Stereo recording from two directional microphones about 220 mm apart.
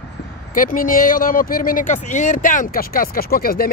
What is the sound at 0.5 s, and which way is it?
Speech, 40° left (ahead or behind).